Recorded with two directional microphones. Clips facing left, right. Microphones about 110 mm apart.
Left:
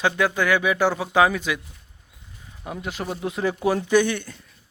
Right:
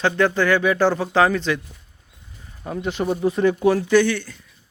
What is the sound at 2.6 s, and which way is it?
Speech, 5° left (ahead or behind).